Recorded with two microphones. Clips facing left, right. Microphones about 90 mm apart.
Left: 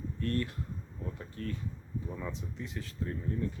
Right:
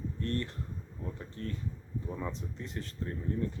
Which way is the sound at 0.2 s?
30° right (ahead or behind).